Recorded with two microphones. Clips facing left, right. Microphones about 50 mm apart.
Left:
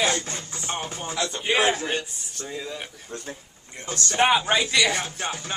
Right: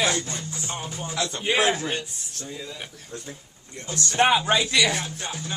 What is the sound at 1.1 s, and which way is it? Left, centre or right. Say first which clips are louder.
Speech: even; centre.